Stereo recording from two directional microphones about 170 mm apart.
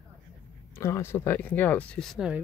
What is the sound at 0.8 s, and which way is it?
Speech, 15° left (ahead or behind).